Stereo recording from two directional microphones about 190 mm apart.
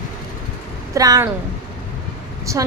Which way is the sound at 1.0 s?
20° right (ahead or behind).